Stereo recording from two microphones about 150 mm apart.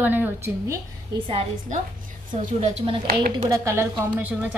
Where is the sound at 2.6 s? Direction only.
40° right (ahead or behind).